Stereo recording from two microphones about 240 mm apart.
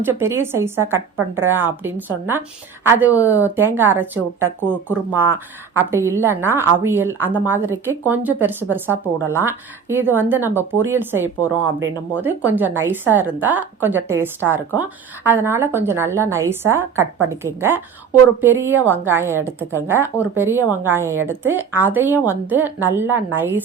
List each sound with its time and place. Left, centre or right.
0.0 s a woman's voice: centre